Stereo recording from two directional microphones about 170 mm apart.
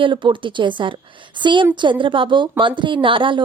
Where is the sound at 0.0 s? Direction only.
30° right (ahead or behind).